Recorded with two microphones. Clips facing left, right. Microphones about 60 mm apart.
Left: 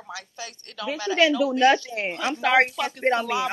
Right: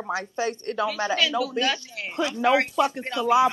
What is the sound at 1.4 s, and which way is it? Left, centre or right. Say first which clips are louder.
Speech: left 6 dB; left.